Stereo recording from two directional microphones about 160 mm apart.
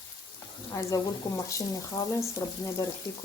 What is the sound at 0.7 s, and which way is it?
Speech, 20° left (ahead or behind).